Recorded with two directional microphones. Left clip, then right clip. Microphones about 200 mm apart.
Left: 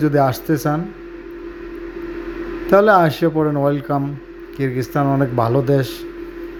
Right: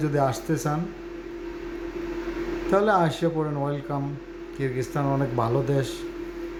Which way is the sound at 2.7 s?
30° left (ahead or behind).